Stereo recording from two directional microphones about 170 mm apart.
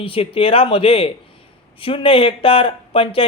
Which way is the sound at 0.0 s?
35° left (ahead or behind).